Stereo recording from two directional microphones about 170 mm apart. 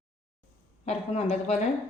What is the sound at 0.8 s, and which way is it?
Speech, 40° left (ahead or behind).